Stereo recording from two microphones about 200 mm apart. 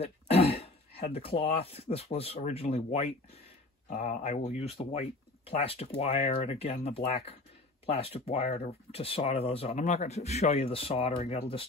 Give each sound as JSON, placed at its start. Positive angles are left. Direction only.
{"t": 0.0, "sound": "speech", "side_deg": 30}